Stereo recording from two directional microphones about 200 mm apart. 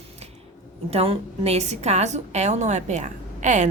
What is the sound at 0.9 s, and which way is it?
A woman's voice, 30° right (ahead or behind).